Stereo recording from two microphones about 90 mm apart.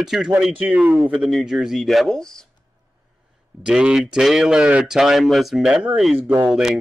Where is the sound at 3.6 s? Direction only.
10° right (ahead or behind).